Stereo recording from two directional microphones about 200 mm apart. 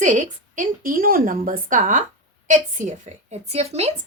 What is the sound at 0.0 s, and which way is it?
A woman's voice, 40° right (ahead or behind).